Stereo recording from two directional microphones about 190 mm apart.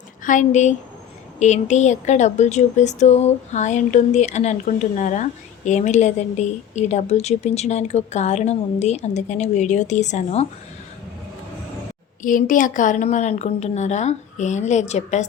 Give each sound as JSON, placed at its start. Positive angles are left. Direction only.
{"t": 0.3, "sound": "a woman's voice", "side_deg": 40}
{"t": 12.2, "sound": "a woman's voice", "side_deg": 45}